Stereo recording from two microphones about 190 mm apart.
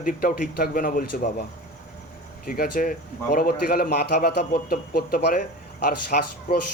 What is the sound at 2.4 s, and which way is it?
A man's voice, 50° left (ahead or behind).